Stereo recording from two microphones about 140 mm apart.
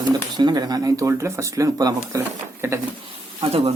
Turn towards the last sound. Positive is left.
turn(degrees=-45)  # may be behind; listen again after turning